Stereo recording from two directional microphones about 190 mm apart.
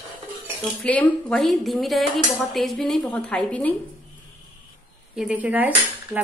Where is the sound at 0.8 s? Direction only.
5° left (ahead or behind).